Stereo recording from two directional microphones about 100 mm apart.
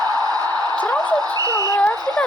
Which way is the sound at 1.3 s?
40° right (ahead or behind).